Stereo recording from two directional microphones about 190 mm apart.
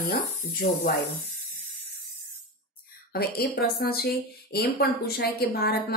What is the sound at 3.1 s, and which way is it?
Speech, 55° left (ahead or behind).